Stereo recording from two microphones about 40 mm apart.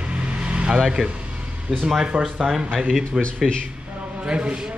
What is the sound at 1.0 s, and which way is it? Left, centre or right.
Speech, centre.